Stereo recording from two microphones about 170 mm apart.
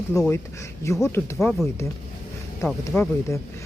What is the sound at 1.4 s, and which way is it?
Speech, centre (ahead or behind).